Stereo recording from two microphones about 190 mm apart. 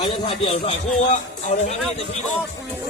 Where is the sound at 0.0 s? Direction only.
30° left (ahead or behind).